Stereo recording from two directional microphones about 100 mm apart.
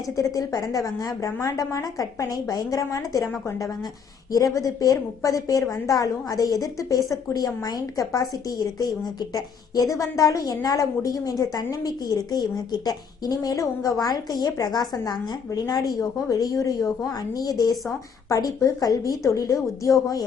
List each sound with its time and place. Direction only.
0.2 s a woman's voice: 35° left (ahead or behind)
4.3 s a woman's voice: 35° left (ahead or behind)